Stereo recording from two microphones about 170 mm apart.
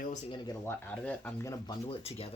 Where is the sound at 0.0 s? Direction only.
45° left (ahead or behind).